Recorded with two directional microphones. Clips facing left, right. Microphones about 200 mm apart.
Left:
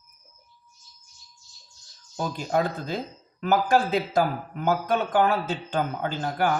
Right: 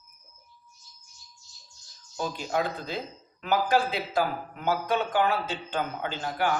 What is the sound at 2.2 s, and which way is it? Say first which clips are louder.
A man's voice: left 3 dB; 45° left (ahead or behind).